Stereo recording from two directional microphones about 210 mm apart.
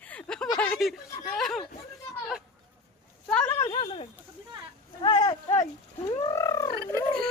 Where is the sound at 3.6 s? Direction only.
25° left (ahead or behind).